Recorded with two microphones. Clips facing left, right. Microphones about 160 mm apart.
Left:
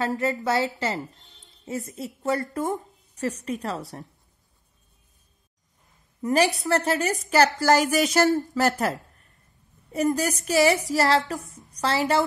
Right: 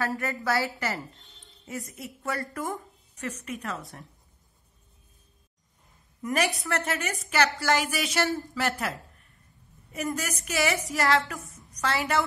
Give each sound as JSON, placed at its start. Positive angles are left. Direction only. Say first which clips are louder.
{"t": 0.0, "sound": "a woman's voice", "louder": "left 5 dB", "side_deg": 20}
{"t": 6.2, "sound": "a woman's voice", "louder": "left 6 dB", "side_deg": 30}
{"t": 9.9, "sound": "a woman's voice", "louder": "left 8 dB", "side_deg": 35}